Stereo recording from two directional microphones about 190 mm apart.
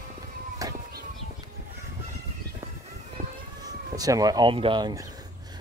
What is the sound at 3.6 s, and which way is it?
Speech, 20° right (ahead or behind).